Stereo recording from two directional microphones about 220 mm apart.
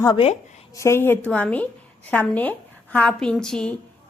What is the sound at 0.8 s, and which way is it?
A woman's voice, 10° left (ahead or behind).